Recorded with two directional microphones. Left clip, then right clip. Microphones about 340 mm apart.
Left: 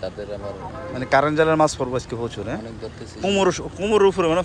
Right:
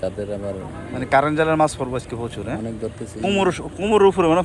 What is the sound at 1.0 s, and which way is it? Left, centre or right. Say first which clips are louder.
Speech: even; centre.